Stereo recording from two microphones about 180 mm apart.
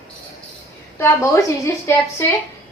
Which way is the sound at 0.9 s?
15° left (ahead or behind).